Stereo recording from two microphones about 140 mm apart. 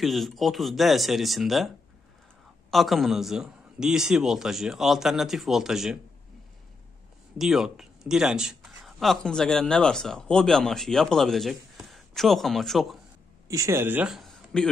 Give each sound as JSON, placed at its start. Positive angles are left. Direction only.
{"t": 0.0, "sound": "a man's voice", "side_deg": 0}
{"t": 2.7, "sound": "a man's voice", "side_deg": 0}
{"t": 7.3, "sound": "a man's voice", "side_deg": 0}
{"t": 13.5, "sound": "speech", "side_deg": -20}
{"t": 14.1, "sound": "a sound", "side_deg": 5}